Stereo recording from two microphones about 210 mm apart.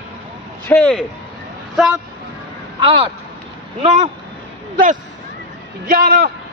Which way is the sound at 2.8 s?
25° right (ahead or behind).